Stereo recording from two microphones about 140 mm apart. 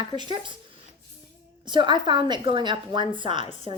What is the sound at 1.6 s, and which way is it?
A woman's voice, 35° right (ahead or behind).